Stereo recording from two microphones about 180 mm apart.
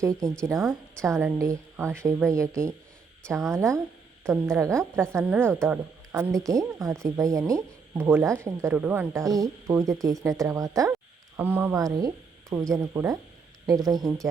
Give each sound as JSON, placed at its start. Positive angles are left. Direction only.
{"t": 0.2, "sound": "a woman's voice", "side_deg": 5}
{"t": 1.0, "sound": "speech", "side_deg": -15}